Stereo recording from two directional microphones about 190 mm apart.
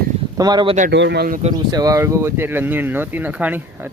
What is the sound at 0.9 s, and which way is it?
Speech, 65° right (ahead or behind).